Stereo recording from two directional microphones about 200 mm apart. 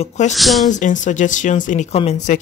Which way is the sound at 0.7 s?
40° left (ahead or behind).